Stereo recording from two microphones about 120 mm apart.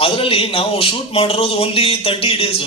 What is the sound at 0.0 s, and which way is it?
Speech, 50° left (ahead or behind).